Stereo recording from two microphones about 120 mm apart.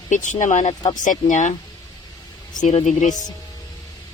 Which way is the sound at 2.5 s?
90° left.